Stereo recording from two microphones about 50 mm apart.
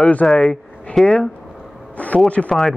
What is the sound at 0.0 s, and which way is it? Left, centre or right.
Speech, left.